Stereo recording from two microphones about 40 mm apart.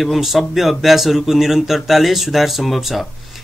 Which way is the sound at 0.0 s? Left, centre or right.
Centre.